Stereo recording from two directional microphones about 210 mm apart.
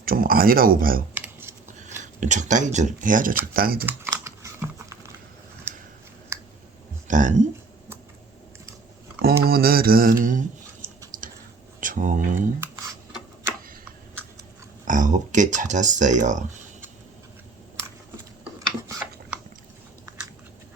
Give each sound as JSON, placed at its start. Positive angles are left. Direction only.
{"t": 0.0, "sound": "speech", "side_deg": -45}
{"t": 1.1, "sound": "a sound", "side_deg": -10}
{"t": 1.8, "sound": "speech", "side_deg": -35}
{"t": 3.8, "sound": "typing", "side_deg": -10}
{"t": 5.7, "sound": "a sound", "side_deg": -10}
{"t": 6.3, "sound": "clicking", "side_deg": -10}
{"t": 7.1, "sound": "speech", "side_deg": -35}
{"t": 9.4, "sound": "speech", "side_deg": -45}
{"t": 11.1, "sound": "typing", "side_deg": -40}
{"t": 11.8, "sound": "speech", "side_deg": -40}
{"t": 14.8, "sound": "speech", "side_deg": -35}